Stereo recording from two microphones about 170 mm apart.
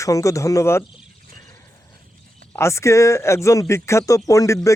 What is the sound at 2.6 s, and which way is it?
Speech, 15° left (ahead or behind).